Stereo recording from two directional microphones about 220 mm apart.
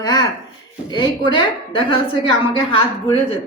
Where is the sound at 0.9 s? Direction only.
20° left (ahead or behind).